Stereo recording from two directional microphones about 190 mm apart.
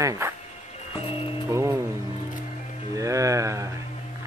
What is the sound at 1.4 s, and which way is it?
Vehicle, 15° right (ahead or behind).